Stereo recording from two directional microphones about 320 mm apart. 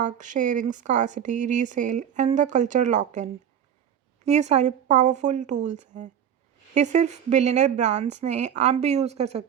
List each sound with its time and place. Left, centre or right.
0.0 s speech: right
4.3 s speech: right